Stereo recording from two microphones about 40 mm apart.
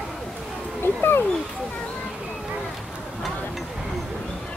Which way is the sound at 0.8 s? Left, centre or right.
Left.